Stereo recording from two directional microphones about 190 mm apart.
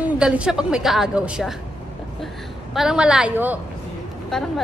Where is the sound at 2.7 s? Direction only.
5° right (ahead or behind).